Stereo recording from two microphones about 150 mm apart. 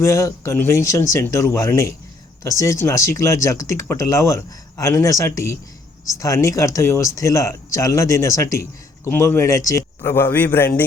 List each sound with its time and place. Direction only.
0.0 s a man's voice: 20° left (ahead or behind)